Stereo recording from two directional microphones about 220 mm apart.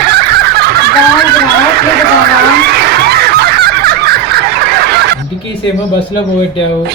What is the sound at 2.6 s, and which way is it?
Fowl, 45° right (ahead or behind).